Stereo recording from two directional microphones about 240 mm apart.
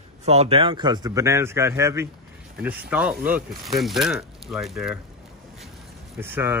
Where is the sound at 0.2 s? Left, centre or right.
Right; by 5.0 s centre.